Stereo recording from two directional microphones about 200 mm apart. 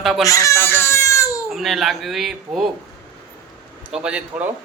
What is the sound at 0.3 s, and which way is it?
Baby cry, 15° left (ahead or behind).